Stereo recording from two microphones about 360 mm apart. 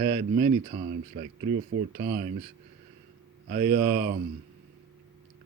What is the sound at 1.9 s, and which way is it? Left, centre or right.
Speech, right.